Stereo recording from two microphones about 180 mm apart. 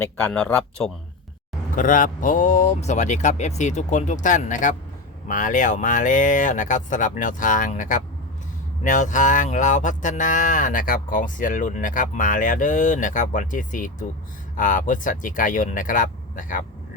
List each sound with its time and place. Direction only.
0.0 s speech: 10° left (ahead or behind)
1.7 s speech: 50° left (ahead or behind)